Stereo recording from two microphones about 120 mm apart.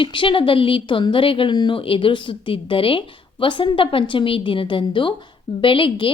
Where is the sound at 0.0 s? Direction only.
45° left (ahead or behind).